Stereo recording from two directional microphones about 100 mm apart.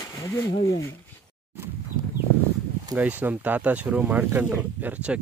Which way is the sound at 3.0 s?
15° right (ahead or behind).